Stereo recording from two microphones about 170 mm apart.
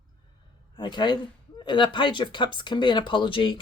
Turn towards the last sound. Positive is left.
turn(degrees=30)  # may be behind; listen again after turning